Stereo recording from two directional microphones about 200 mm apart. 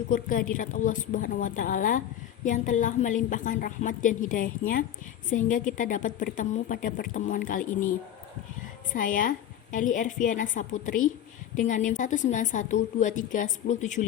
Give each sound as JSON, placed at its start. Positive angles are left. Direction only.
{"t": 0.1, "sound": "a woman's voice", "side_deg": 40}
{"t": 8.9, "sound": "a woman's voice", "side_deg": 40}